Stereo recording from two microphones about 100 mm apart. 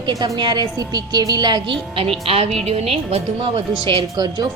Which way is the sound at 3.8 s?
50° right (ahead or behind).